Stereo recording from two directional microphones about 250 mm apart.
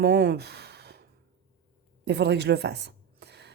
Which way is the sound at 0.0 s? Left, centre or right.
Right.